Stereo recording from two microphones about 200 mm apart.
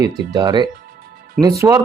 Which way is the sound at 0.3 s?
20° right (ahead or behind).